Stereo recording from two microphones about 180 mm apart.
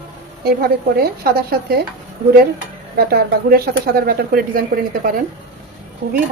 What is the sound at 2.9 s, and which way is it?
Speech, 60° right (ahead or behind).